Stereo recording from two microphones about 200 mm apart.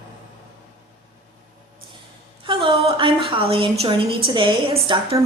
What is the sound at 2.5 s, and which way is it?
A woman's voice, 25° right (ahead or behind).